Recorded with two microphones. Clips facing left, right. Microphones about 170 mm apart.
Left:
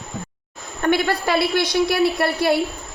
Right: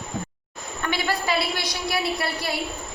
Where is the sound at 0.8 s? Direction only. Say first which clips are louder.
Left 7 dB; 50° left (ahead or behind).